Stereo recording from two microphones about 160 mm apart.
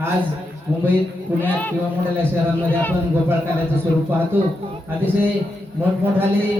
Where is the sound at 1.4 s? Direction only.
10° left (ahead or behind).